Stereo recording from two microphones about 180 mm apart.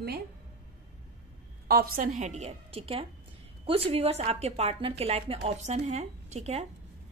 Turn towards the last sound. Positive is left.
turn(degrees=-35)  # may be behind; listen again after turning